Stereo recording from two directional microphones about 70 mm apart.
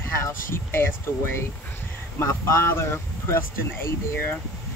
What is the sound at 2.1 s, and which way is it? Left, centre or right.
Speech, left.